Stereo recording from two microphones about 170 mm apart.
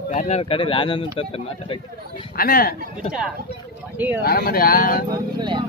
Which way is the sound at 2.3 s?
60° left (ahead or behind).